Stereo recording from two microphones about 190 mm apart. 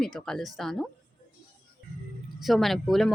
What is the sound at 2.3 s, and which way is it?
Speech, centre (ahead or behind).